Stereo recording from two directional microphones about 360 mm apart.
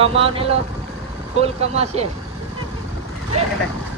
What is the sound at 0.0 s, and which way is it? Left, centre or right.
Speech, centre.